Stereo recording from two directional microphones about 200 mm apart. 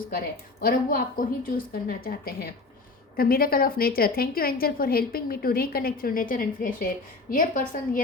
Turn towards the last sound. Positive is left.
turn(degrees=40)  # may be behind; listen again after turning